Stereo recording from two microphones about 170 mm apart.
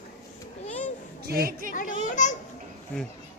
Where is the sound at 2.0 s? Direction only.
45° left (ahead or behind).